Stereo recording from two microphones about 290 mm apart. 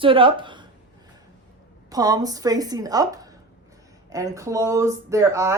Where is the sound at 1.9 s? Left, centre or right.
Centre.